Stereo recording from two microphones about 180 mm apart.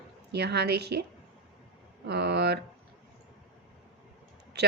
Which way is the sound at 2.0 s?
65° right (ahead or behind).